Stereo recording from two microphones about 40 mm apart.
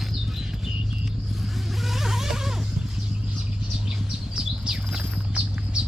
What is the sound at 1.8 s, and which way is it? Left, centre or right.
Vehicle, centre.